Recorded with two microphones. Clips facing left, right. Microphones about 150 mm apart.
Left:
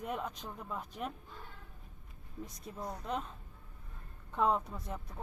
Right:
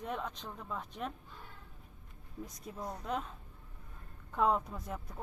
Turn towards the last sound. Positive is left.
turn(degrees=0)  # may be behind; listen again after turning